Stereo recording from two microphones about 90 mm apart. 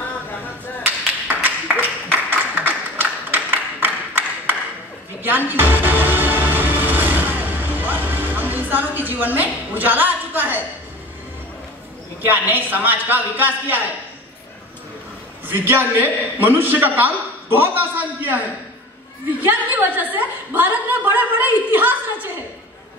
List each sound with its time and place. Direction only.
1.3 s a sound: 20° right (ahead or behind)
5.2 s music: 20° right (ahead or behind)
12.3 s a man's voice: 20° right (ahead or behind)
15.4 s a man's voice: 20° right (ahead or behind)
19.4 s a man's voice: 20° right (ahead or behind)